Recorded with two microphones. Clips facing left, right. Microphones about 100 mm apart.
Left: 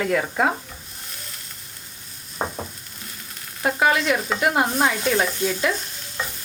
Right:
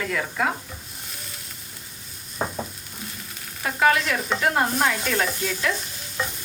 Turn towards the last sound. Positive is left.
turn(degrees=0)  # may be behind; listen again after turning